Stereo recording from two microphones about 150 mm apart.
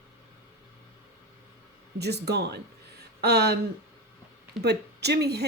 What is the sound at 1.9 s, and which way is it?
Speech, 90° right.